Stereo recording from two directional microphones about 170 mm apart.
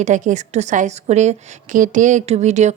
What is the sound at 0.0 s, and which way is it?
Speech, 45° right (ahead or behind).